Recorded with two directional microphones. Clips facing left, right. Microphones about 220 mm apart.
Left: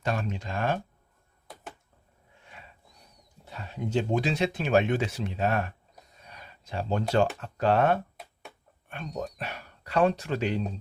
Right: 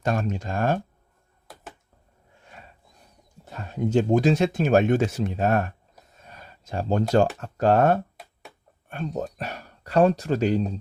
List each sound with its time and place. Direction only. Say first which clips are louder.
0.0 s speech: right 5 dB; 45° right (ahead or behind)
3.4 s speech: right 7 dB; 45° right (ahead or behind)
6.2 s a sound: right 3 dB; 45° right (ahead or behind)
7.3 s speech: right 4 dB; 45° right (ahead or behind)
8.2 s a sound: even; centre (ahead or behind)
9.2 s speech: right 3 dB; 40° right (ahead or behind)